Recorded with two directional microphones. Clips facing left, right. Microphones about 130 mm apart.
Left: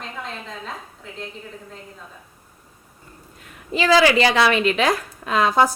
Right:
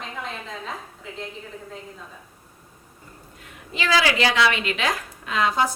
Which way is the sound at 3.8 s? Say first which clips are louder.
Left 6 dB; 35° left (ahead or behind).